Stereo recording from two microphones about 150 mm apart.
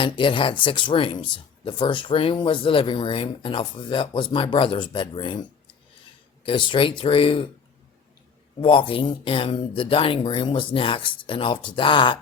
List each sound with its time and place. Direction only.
0.0 s speech: 35° left (ahead or behind)
8.6 s speech: 35° left (ahead or behind)